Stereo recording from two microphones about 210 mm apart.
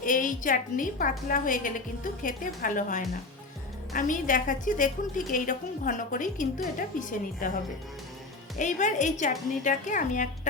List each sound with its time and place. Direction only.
0.0 s a woman's voice: 40° left (ahead or behind)